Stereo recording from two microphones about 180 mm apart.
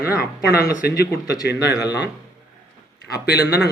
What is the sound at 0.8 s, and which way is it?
Speech, 60° left (ahead or behind).